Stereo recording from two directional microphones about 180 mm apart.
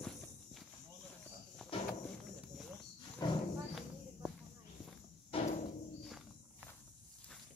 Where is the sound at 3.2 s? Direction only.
25° left (ahead or behind).